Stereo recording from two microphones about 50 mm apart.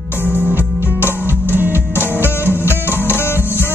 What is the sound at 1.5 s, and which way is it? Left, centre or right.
Music, right.